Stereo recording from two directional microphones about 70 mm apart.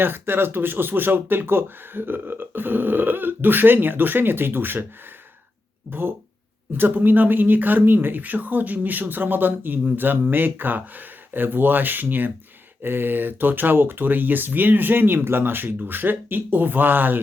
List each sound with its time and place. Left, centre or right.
0.0 s speech: right
5.9 s speech: right